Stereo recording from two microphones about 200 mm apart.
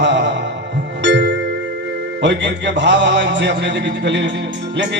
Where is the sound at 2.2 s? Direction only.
60° right (ahead or behind).